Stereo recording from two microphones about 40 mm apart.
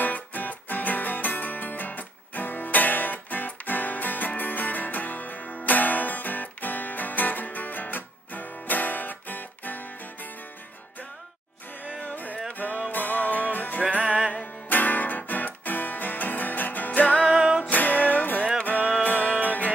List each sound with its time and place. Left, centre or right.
0.0 s music: left
12.0 s music: left
13.8 s music: right
14.3 s music: left
17.3 s music: right
17.6 s music: left